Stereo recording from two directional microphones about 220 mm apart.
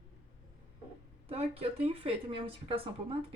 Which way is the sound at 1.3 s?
25° right (ahead or behind).